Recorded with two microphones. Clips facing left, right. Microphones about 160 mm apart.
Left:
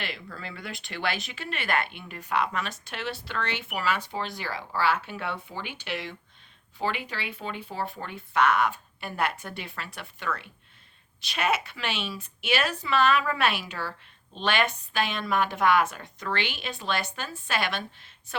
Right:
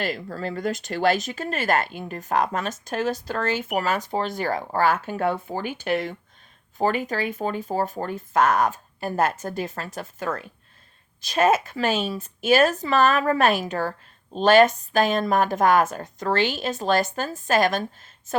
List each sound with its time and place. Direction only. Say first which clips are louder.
0.0 s speech: right 9 dB; 40° right (ahead or behind)